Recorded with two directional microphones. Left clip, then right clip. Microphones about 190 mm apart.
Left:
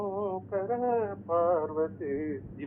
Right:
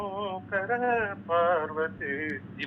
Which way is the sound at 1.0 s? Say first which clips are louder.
Right 2 dB; 45° right (ahead or behind).